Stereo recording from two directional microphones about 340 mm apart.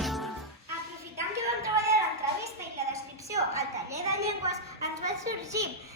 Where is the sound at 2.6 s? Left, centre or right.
Centre.